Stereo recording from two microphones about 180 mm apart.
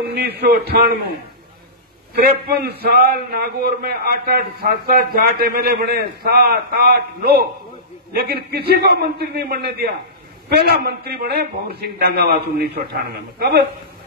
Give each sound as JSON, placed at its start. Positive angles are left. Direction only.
{"t": 0.1, "sound": "a man's voice", "side_deg": -65}
{"t": 2.1, "sound": "a man's voice", "side_deg": -60}